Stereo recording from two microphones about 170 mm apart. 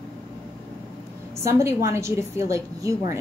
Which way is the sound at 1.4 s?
15° right (ahead or behind).